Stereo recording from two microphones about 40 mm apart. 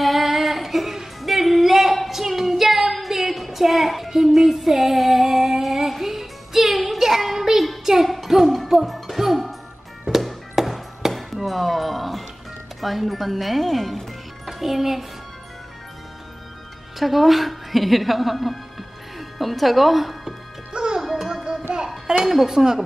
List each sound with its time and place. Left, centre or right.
0.0 s female singing: centre
7.8 s music: centre
17.0 s music: centre
20.7 s music: right
21.0 s music: centre
21.7 s a sound: centre
22.0 s a sound: centre